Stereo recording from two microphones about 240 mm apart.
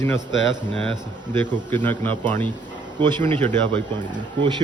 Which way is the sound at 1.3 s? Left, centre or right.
Centre.